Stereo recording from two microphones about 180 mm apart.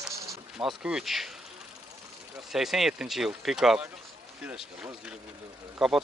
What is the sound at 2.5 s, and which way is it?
Speech, centre (ahead or behind).